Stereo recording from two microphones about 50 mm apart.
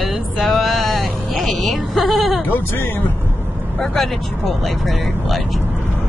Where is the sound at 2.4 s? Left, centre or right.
Left.